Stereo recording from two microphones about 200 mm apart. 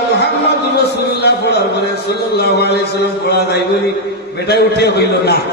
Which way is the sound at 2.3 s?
55° left (ahead or behind).